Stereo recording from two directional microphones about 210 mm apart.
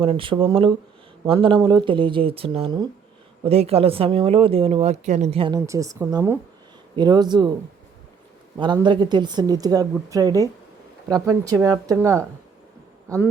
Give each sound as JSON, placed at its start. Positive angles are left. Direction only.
{"t": 0.0, "sound": "speech", "side_deg": -25}
{"t": 8.5, "sound": "speech", "side_deg": -20}